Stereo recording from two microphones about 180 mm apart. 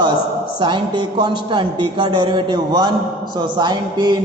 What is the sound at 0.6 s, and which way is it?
A man's voice, 25° right (ahead or behind).